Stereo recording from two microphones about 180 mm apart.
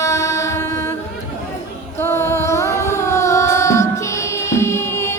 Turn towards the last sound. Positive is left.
turn(degrees=15)  # may be behind; listen again after turning